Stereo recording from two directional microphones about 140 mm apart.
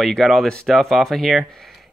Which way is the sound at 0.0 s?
Centre (ahead or behind).